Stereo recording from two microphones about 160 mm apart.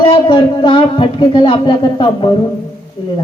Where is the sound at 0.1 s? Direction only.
30° left (ahead or behind).